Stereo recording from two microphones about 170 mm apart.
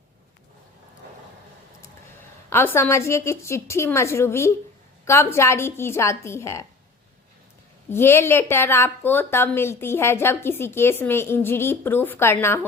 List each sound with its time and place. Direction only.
2.5 s a woman's voice: 15° left (ahead or behind)
7.9 s a woman's voice: 15° left (ahead or behind)